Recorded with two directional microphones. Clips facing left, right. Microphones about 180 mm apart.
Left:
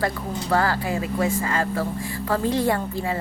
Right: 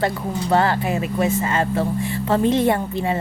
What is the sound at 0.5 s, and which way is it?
A woman's voice, 25° right (ahead or behind).